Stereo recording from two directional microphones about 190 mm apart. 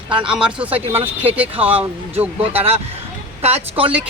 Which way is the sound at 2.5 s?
30° right (ahead or behind).